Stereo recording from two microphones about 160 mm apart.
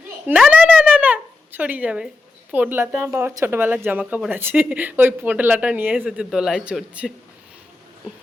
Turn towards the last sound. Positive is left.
turn(degrees=-5)  # may be behind; listen again after turning